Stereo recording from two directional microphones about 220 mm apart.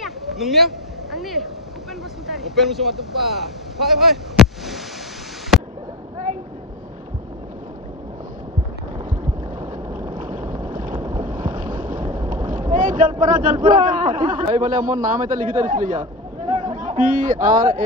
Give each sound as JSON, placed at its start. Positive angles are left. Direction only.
{"t": 0.0, "sound": "a sound", "side_deg": 0}
{"t": 2.2, "sound": "speech", "side_deg": 0}
{"t": 10.0, "sound": "boat", "side_deg": -35}
{"t": 13.2, "sound": "a man's voice", "side_deg": -35}